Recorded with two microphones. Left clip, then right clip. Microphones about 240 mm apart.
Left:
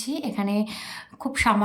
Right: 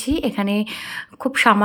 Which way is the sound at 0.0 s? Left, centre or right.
Centre.